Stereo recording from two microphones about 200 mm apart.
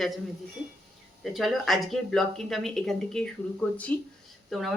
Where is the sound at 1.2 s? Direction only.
Centre (ahead or behind).